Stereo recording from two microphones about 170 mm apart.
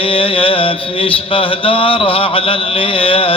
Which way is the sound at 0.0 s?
30° left (ahead or behind).